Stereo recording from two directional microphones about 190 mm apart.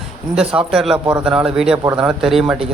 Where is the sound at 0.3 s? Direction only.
5° right (ahead or behind).